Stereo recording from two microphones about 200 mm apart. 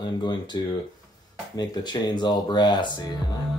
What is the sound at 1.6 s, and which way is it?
Speech, 20° left (ahead or behind).